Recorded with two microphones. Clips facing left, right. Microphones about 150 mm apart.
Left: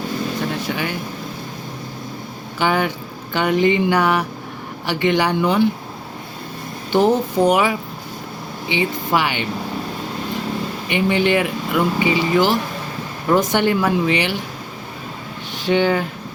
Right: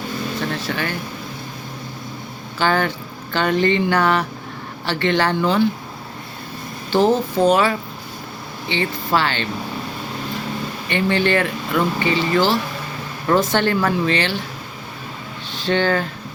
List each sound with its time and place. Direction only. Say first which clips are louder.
0.3 s speech: left 1 dB; 15° left (ahead or behind)
2.6 s speech: even; 15° left (ahead or behind)
6.9 s speech: left 1 dB; 15° left (ahead or behind)
10.8 s speech: left 1 dB; 15° left (ahead or behind)
15.5 s speech: left 2 dB; 15° left (ahead or behind)